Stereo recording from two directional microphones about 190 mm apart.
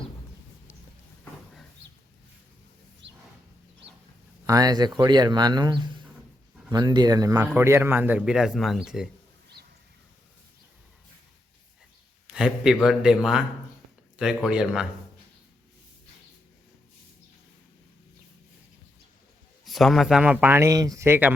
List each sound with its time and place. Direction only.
3.0 s a sound: 70° right (ahead or behind)
4.4 s a man's voice: 20° right (ahead or behind); by 9.0 s 5° right (ahead or behind)
12.3 s speech: 5° right (ahead or behind)
19.6 s a man's voice: centre (ahead or behind)